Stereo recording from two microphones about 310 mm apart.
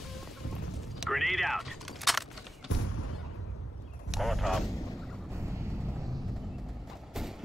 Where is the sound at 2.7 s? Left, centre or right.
Left.